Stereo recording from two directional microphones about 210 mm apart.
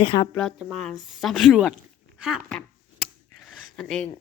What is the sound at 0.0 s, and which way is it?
Speech, 25° left (ahead or behind).